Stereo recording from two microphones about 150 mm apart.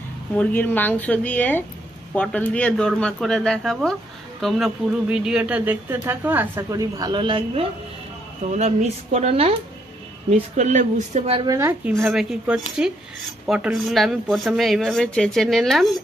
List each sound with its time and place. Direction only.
0.4 s speech: 10° left (ahead or behind); by 7.6 s 35° right (ahead or behind)
8.4 s speech: 50° right (ahead or behind)
10.5 s speech: 55° right (ahead or behind)
11.4 s speech: 20° right (ahead or behind)
11.9 s speech: centre (ahead or behind)